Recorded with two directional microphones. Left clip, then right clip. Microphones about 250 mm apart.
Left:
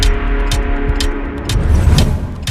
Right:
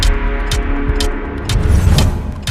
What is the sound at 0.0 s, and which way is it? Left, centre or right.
Music, centre.